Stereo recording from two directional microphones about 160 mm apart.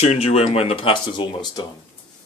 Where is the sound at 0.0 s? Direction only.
40° left (ahead or behind).